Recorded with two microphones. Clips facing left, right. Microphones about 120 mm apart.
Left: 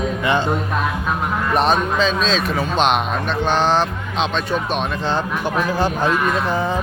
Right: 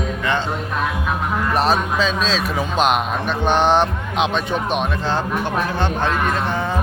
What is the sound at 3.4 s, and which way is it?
Speech, 15° right (ahead or behind).